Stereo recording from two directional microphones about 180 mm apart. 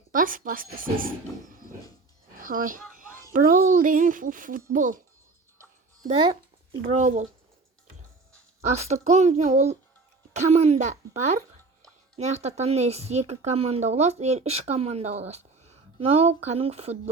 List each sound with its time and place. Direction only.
0.1 s speech: 50° right (ahead or behind)
2.9 s music: 50° right (ahead or behind)
3.3 s speech: 50° right (ahead or behind)
5.5 s music: 20° right (ahead or behind)
6.9 s speech: 40° right (ahead or behind)
8.6 s speech: 40° right (ahead or behind)